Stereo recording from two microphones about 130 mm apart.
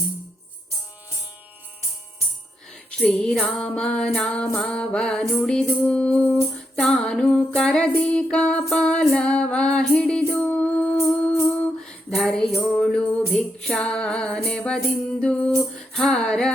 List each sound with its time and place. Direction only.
3.0 s music: 5° left (ahead or behind)